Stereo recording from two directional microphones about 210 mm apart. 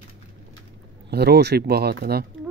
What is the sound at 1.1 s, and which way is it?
Speech, 50° right (ahead or behind).